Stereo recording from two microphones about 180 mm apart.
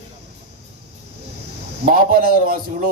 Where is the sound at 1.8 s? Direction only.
55° right (ahead or behind).